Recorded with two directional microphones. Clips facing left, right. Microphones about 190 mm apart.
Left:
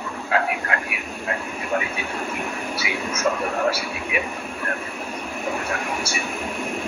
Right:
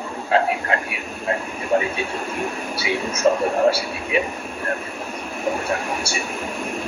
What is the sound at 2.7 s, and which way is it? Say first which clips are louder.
A man's voice: right 3 dB; 30° right (ahead or behind).